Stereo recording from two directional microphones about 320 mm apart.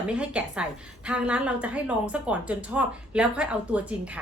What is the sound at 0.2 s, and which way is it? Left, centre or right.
A woman's voice, centre.